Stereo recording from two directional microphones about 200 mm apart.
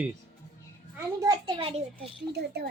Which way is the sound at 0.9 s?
20° right (ahead or behind).